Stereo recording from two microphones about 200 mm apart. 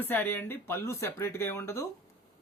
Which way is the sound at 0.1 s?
10° left (ahead or behind).